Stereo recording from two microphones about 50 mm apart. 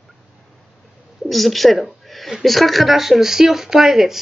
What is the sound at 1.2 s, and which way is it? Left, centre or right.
A woman's voice, centre.